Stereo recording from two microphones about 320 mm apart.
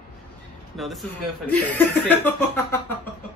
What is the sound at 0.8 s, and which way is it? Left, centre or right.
Speech, centre.